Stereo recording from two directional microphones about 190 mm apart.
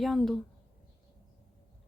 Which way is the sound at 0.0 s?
Centre (ahead or behind).